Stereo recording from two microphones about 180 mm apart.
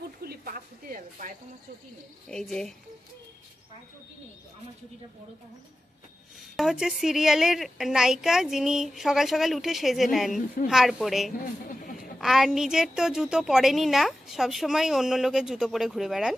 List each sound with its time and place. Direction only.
0.2 s a sound: 55° right (ahead or behind)
2.2 s a woman's voice: 5° left (ahead or behind)
6.5 s a woman's voice: centre (ahead or behind)